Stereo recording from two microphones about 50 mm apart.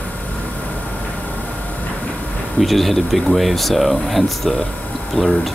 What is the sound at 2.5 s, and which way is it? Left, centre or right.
Speech, centre.